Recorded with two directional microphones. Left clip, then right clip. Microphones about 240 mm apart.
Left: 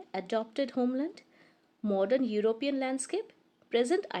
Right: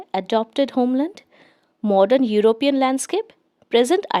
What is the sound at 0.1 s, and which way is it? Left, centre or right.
Speech, right.